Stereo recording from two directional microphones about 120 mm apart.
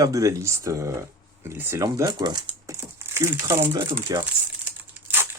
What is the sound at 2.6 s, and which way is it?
Speech, 25° right (ahead or behind).